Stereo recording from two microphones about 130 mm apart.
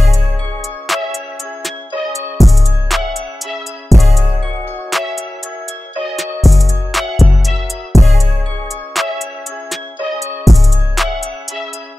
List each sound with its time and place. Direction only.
0.8 s music: centre (ahead or behind)
6.1 s music: centre (ahead or behind)
10.4 s music: centre (ahead or behind)